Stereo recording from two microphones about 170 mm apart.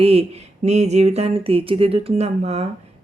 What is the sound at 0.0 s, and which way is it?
Speech, 35° right (ahead or behind).